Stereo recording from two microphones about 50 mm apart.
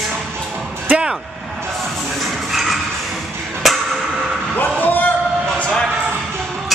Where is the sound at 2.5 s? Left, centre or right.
Centre.